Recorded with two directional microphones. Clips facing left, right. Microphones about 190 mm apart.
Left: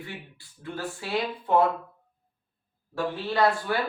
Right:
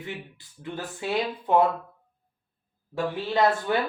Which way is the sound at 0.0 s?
20° right (ahead or behind).